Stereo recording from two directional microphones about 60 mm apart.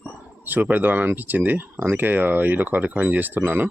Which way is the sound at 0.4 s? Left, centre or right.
Right.